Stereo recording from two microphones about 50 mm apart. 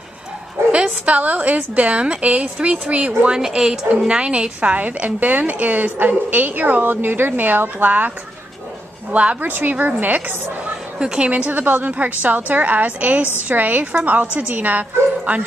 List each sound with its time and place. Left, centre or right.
0.7 s a woman's voice: right
3.3 s a woman's voice: centre; by 8.1 s right
9.1 s a woman's voice: right
9.4 s a woman's voice: right
10.6 s a woman's voice: centre